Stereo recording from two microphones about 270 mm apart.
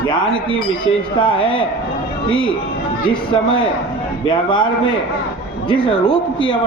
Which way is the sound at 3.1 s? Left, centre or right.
Centre.